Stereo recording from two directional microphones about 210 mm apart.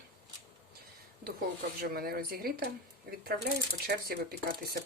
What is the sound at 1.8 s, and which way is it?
Speech, 45° right (ahead or behind).